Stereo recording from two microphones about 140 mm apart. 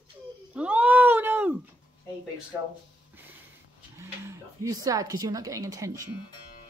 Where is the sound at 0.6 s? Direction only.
10° right (ahead or behind).